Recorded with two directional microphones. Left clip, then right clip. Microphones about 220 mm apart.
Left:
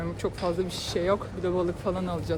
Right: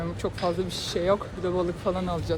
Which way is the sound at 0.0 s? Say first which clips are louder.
Right 1 dB; 15° left (ahead or behind).